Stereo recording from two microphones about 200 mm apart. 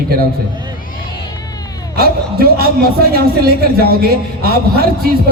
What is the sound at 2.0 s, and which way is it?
A man's voice, 50° right (ahead or behind).